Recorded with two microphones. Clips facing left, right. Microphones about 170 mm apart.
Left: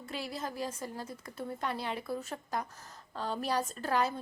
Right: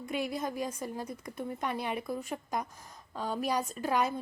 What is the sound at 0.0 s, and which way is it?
A woman's voice, 20° right (ahead or behind).